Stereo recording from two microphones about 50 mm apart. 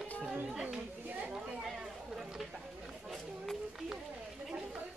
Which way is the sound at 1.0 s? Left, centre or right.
Right.